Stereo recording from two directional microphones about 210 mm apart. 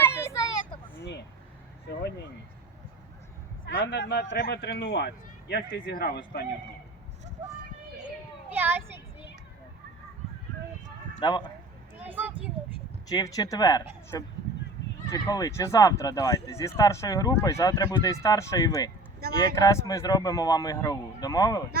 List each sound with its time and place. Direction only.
0.0 s vehicle: 10° left (ahead or behind)
1.9 s a man's voice: 50° left (ahead or behind)
3.7 s a man's voice: 60° left (ahead or behind)
8.4 s speech: 10° right (ahead or behind)
11.2 s speech: 20° left (ahead or behind)
12.0 s a sound: 10° right (ahead or behind)
13.1 s speech: 15° left (ahead or behind)